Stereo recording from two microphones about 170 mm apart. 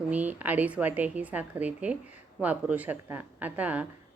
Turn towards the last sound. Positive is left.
turn(degrees=-10)  # may be behind; listen again after turning